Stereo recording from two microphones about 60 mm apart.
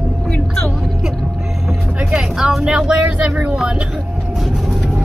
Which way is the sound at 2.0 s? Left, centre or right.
Centre.